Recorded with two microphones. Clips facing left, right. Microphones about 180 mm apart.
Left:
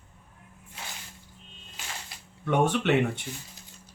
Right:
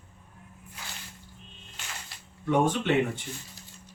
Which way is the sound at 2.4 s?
70° left (ahead or behind).